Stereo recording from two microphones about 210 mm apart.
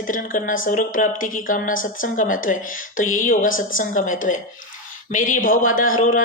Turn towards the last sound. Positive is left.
turn(degrees=40)  # may be behind; listen again after turning